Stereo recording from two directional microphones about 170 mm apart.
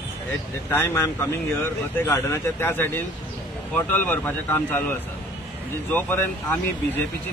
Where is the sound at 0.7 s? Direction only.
15° left (ahead or behind).